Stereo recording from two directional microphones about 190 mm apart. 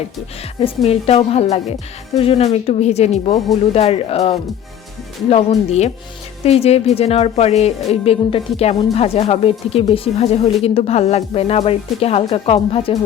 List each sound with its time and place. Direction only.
0.9 s a woman's voice: 30° left (ahead or behind)